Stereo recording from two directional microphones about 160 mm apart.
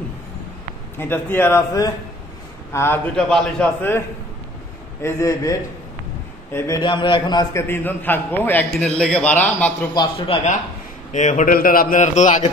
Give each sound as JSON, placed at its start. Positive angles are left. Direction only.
{"t": 0.9, "sound": "a man's voice", "side_deg": 15}
{"t": 3.2, "sound": "a man's voice", "side_deg": 5}
{"t": 5.0, "sound": "a man's voice", "side_deg": 20}
{"t": 7.6, "sound": "a man's voice", "side_deg": 15}
{"t": 9.9, "sound": "a man's voice", "side_deg": 35}
{"t": 11.1, "sound": "a man's voice", "side_deg": 50}